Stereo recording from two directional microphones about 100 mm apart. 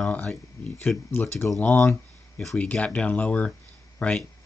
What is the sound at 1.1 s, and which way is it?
Speech, 25° left (ahead or behind).